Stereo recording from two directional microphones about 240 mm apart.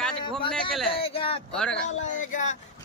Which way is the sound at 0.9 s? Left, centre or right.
Left.